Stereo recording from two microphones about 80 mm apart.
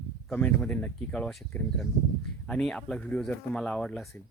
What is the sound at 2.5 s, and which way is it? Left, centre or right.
Speech, centre.